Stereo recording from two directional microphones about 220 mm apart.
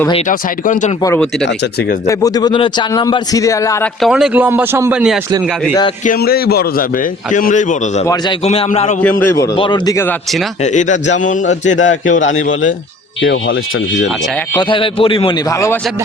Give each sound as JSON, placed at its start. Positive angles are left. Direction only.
{"t": 0.3, "sound": "a man's voice", "side_deg": 35}
{"t": 1.0, "sound": "a man's voice", "side_deg": 10}
{"t": 4.0, "sound": "speech", "side_deg": 0}
{"t": 6.1, "sound": "a man's voice", "side_deg": 45}
{"t": 8.0, "sound": "a man's voice", "side_deg": 20}
{"t": 8.4, "sound": "a man's voice", "side_deg": 30}
{"t": 9.0, "sound": "a man's voice", "side_deg": 10}
{"t": 10.6, "sound": "a man's voice", "side_deg": 35}
{"t": 14.5, "sound": "a man's voice", "side_deg": 20}